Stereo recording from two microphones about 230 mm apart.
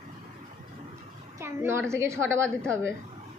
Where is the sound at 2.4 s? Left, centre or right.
Centre.